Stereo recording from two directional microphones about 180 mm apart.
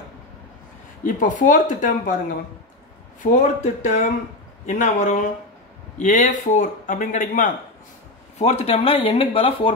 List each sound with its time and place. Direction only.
1.0 s a man's voice: 45° left (ahead or behind)
3.3 s a man's voice: 40° left (ahead or behind)
8.4 s speech: 35° left (ahead or behind)